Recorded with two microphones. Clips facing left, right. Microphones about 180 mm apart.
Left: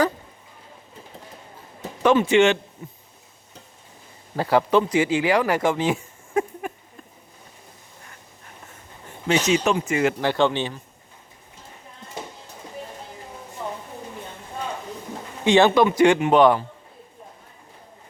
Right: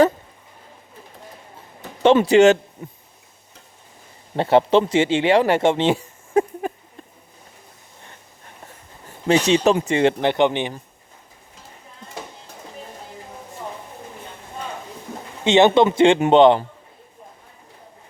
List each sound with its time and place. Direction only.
2.2 s speech: 40° right (ahead or behind)
4.4 s speech: 25° right (ahead or behind)
9.2 s speech: 35° right (ahead or behind); by 10.8 s 20° right (ahead or behind)
15.4 s speech: 20° right (ahead or behind)